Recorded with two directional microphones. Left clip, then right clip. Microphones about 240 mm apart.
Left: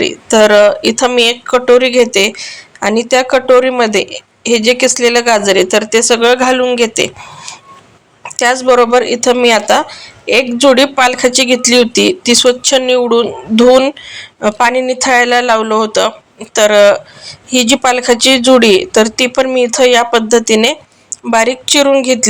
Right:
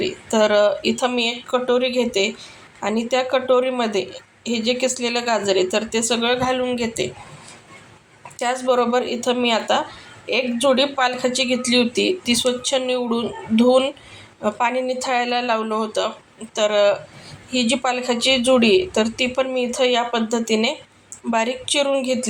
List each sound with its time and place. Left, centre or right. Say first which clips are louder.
0.0 s speech: left 10 dB; left